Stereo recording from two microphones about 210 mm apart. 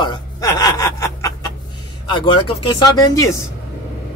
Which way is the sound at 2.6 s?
15° left (ahead or behind).